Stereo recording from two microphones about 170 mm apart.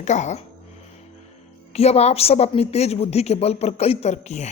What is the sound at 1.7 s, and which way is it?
A woman's voice, 40° left (ahead or behind).